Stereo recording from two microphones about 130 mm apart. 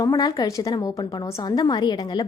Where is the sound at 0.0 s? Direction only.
30° left (ahead or behind).